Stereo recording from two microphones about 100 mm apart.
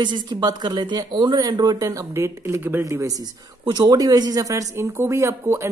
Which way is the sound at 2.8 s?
35° right (ahead or behind).